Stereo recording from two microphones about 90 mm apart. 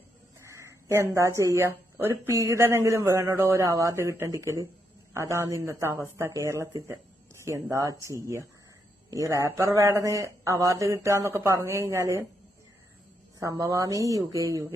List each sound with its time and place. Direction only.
0.3 s speech: 35° right (ahead or behind)
9.6 s speech: 35° right (ahead or behind)
13.4 s speech: 35° right (ahead or behind)